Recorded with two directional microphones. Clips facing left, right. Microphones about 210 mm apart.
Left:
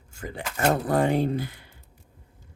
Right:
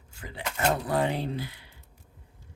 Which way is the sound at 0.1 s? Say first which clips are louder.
Left 3 dB; 45° left (ahead or behind).